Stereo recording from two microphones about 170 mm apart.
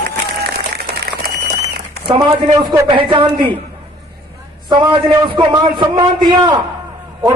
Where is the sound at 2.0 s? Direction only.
25° right (ahead or behind).